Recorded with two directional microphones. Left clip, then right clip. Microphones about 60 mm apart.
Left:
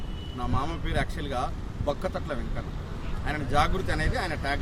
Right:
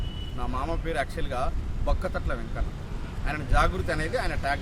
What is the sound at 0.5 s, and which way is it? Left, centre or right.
Speech, right.